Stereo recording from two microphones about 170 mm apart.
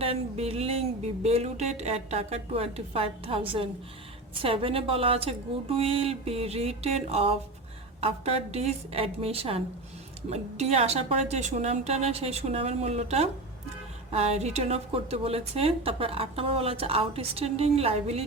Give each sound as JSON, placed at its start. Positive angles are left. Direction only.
{"t": 0.0, "sound": "a woman's voice", "side_deg": -35}